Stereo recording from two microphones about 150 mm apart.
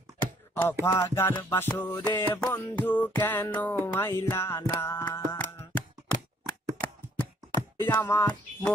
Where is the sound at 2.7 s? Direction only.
10° left (ahead or behind).